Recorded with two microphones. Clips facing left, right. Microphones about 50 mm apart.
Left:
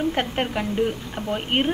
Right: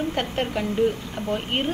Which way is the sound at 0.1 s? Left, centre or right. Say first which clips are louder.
Left 1 dB; centre.